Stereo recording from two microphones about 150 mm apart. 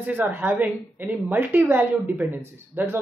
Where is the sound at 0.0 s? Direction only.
10° right (ahead or behind).